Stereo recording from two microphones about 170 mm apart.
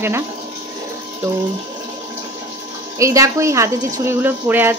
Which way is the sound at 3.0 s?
20° right (ahead or behind).